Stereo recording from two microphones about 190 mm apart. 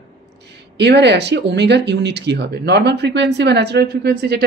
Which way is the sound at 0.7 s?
65° right (ahead or behind).